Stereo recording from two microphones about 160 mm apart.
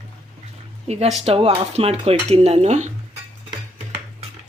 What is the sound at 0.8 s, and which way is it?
A woman's voice, 40° right (ahead or behind).